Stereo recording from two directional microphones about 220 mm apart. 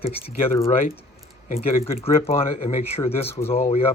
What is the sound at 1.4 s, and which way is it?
Speech, 25° left (ahead or behind).